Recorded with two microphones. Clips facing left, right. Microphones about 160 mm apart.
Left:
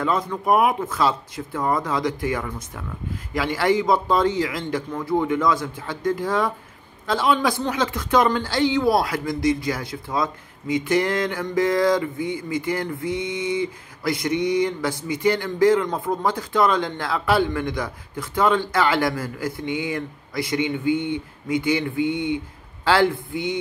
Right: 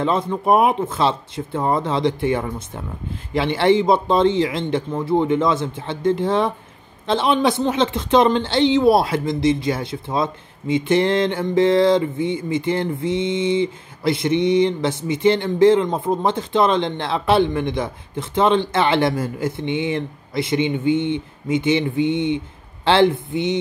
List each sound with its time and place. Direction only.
0.0 s a man's voice: 25° right (ahead or behind)